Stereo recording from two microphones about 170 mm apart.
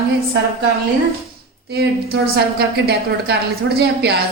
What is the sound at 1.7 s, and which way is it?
A woman's voice, 75° right (ahead or behind).